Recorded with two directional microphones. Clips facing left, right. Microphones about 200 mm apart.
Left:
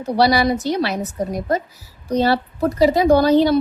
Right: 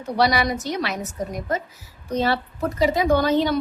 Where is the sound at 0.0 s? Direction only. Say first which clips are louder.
Left 5 dB; 35° left (ahead or behind).